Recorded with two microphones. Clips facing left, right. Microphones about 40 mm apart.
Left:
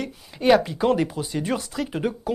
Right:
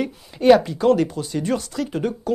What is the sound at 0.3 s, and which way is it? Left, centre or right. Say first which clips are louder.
Speech: right 4 dB; centre.